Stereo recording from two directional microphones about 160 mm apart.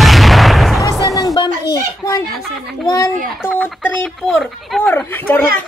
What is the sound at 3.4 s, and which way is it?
Speech, 10° left (ahead or behind).